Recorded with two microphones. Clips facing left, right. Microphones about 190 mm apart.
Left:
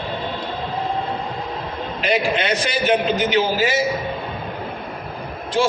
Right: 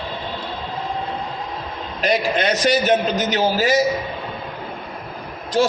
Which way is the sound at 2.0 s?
40° right (ahead or behind).